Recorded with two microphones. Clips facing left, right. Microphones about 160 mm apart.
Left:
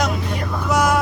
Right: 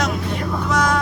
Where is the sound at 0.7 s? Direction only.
10° left (ahead or behind).